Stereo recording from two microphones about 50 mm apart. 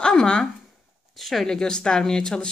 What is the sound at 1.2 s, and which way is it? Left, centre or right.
Speech, centre.